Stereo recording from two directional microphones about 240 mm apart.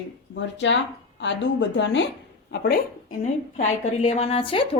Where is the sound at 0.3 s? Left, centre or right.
Left.